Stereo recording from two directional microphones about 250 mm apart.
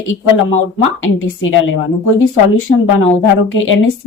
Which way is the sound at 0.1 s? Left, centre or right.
Left.